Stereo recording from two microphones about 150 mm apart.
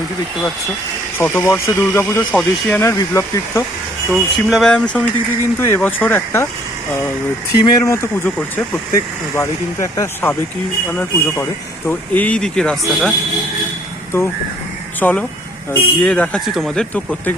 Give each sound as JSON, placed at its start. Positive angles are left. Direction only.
{"t": 1.2, "sound": "speech", "side_deg": 15}
{"t": 2.9, "sound": "speech", "side_deg": 20}
{"t": 4.1, "sound": "speech", "side_deg": 0}
{"t": 5.5, "sound": "speech", "side_deg": 15}
{"t": 7.6, "sound": "speech", "side_deg": 25}
{"t": 15.0, "sound": "speech", "side_deg": 10}
{"t": 16.9, "sound": "speech", "side_deg": 10}